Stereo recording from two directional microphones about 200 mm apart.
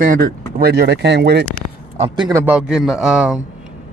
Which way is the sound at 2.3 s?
5° right (ahead or behind).